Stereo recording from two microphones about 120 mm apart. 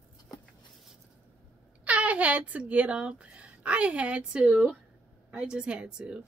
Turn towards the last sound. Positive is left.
turn(degrees=-5)  # may be behind; listen again after turning